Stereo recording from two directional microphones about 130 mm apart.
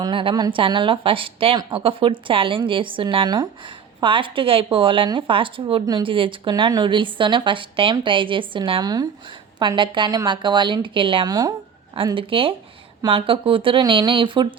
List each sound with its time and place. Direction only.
0.0 s a woman's voice: 40° right (ahead or behind)
6.5 s a woman's voice: 30° right (ahead or behind)
12.1 s a woman's voice: 45° right (ahead or behind)